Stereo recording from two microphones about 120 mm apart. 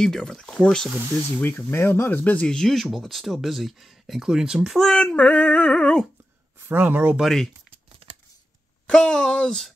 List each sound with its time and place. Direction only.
0.0 s speech: 5° left (ahead or behind)
6.6 s speech: 20° right (ahead or behind)
7.2 s speech: 5° left (ahead or behind)
7.7 s a sound: 50° right (ahead or behind)
8.8 s speech: 5° left (ahead or behind)